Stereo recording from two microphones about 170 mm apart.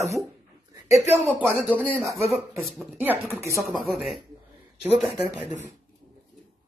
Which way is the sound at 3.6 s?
Centre (ahead or behind).